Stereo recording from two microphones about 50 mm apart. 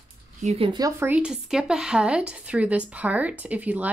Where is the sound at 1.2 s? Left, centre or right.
Centre.